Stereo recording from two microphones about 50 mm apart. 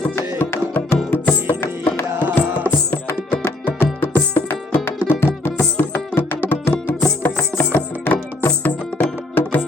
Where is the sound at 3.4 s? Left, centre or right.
Left.